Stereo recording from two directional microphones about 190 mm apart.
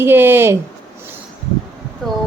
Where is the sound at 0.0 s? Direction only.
10° right (ahead or behind).